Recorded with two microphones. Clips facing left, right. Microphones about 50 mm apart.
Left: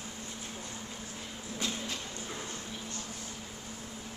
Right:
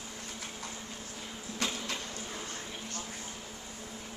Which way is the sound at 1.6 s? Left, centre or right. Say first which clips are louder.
Right 2 dB; right.